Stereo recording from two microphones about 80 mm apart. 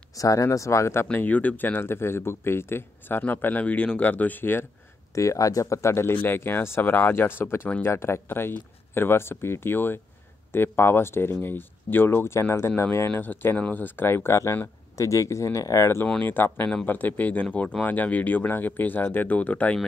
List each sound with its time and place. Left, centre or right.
0.1 s speech: left
1.1 s speech: left
5.1 s speech: left; by 19.8 s centre